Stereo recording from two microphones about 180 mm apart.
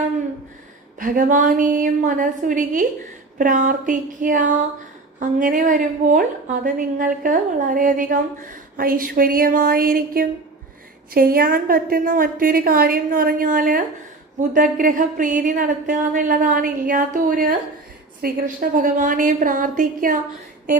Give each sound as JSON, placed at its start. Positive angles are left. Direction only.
{"t": 0.9, "sound": "a woman's voice", "side_deg": -50}